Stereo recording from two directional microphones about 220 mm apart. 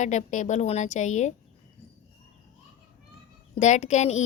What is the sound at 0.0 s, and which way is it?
A woman's voice, 35° left (ahead or behind).